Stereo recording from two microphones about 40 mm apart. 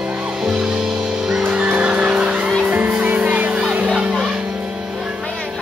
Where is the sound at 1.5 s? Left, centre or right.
Right.